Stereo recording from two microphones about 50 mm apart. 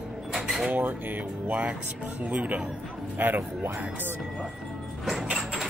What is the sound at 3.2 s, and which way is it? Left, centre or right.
Speech, right.